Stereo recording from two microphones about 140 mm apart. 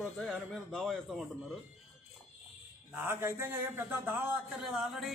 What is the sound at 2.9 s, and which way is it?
A man's voice, 15° right (ahead or behind).